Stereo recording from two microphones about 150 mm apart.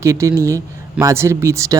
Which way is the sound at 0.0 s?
20° right (ahead or behind).